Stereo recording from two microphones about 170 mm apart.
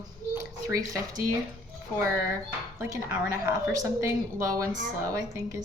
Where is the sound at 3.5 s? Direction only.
20° right (ahead or behind).